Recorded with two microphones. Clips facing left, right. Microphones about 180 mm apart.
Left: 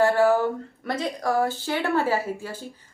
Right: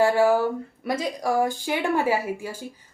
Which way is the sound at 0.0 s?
10° right (ahead or behind).